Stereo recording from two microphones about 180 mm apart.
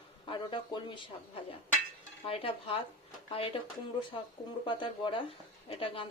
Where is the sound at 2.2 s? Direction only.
30° left (ahead or behind).